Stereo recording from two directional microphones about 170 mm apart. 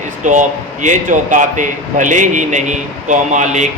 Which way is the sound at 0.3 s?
45° right (ahead or behind).